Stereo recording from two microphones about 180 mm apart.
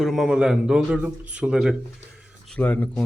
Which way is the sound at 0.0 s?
Centre (ahead or behind).